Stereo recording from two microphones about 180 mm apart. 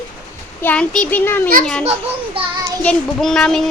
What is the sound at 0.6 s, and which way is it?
Speech, 5° left (ahead or behind).